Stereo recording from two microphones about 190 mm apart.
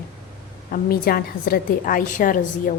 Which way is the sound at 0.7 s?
50° left (ahead or behind).